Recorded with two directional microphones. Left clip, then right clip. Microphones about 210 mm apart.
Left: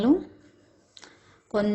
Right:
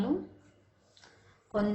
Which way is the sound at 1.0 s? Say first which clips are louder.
Left 9 dB; 45° left (ahead or behind).